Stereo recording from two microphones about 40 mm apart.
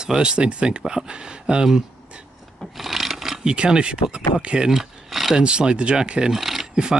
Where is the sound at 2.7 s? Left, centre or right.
Centre.